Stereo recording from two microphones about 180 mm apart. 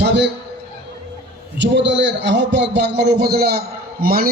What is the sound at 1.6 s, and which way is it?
A man's voice, 80° right.